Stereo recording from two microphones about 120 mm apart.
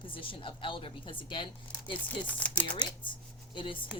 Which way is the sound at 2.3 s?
10° left (ahead or behind).